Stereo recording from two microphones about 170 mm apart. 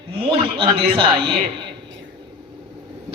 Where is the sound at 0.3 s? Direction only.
30° right (ahead or behind).